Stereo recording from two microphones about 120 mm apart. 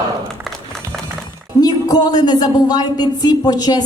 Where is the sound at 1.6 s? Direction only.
35° left (ahead or behind).